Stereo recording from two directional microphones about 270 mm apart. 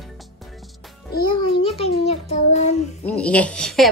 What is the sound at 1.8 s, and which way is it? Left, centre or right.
Child singing, left.